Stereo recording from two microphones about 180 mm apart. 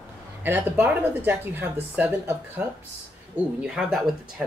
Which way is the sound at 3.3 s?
5° right (ahead or behind).